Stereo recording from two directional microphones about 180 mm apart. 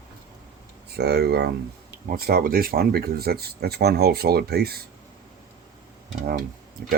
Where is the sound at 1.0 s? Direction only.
65° right (ahead or behind).